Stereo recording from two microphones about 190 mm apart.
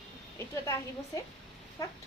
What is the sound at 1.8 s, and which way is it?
Speech, 15° left (ahead or behind).